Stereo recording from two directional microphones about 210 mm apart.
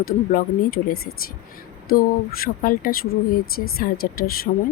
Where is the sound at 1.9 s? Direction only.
45° left (ahead or behind).